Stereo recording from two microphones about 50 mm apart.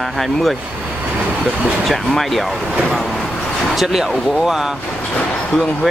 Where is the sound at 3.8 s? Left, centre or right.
Centre.